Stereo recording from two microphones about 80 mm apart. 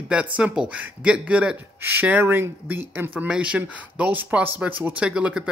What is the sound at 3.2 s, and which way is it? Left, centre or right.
Speech, centre.